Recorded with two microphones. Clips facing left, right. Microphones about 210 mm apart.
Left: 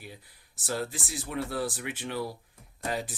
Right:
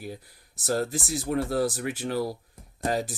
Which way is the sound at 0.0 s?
40° right (ahead or behind).